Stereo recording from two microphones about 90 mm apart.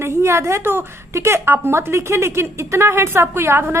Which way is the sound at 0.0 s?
30° right (ahead or behind).